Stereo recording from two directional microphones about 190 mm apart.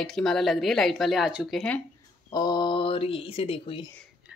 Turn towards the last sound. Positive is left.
turn(degrees=30)  # may be behind; listen again after turning